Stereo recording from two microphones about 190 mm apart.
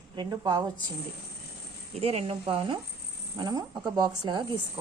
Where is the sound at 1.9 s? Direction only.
30° right (ahead or behind).